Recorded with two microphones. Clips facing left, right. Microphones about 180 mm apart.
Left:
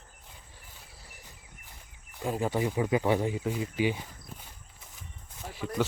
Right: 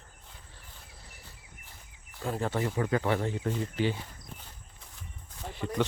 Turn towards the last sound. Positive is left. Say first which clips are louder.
# even
turn(degrees=5)  # may be behind; listen again after turning